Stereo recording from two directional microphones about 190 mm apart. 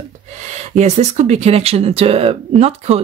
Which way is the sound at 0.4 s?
35° right (ahead or behind).